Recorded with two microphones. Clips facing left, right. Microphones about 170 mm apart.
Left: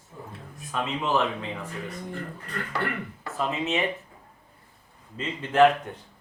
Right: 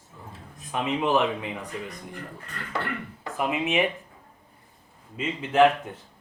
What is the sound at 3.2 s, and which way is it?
Speech, 15° right (ahead or behind).